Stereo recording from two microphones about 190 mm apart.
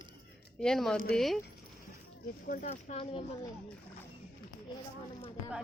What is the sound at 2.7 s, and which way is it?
Speech, 35° left (ahead or behind).